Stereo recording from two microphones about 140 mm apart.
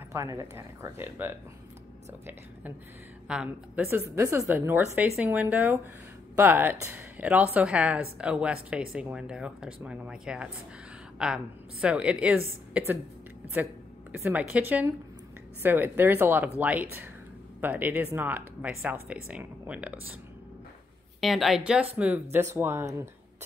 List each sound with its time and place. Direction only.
0.1 s speech: 20° right (ahead or behind)
3.3 s speech: 5° right (ahead or behind)
3.8 s speech: 20° right (ahead or behind)
21.2 s speech: centre (ahead or behind); by 23.0 s 20° right (ahead or behind)